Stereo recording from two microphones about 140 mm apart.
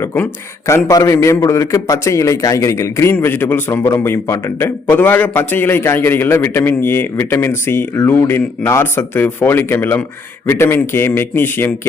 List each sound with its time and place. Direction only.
0.0 s a man's voice: 20° left (ahead or behind)